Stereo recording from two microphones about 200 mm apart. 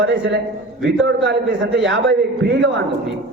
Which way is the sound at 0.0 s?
65° right (ahead or behind).